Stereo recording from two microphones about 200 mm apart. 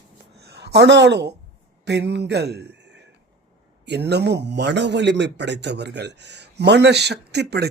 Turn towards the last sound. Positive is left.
turn(degrees=-55)  # may be behind; listen again after turning